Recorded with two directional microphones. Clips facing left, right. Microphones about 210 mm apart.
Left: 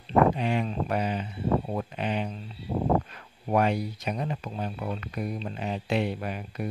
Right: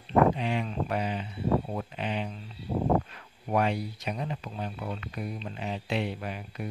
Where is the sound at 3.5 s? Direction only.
45° left (ahead or behind).